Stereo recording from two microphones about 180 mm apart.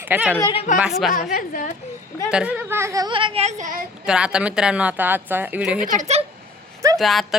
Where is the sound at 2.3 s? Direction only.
5° right (ahead or behind); by 3.8 s 40° right (ahead or behind).